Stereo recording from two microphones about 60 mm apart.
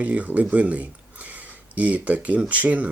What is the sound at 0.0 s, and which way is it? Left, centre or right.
Speech, right.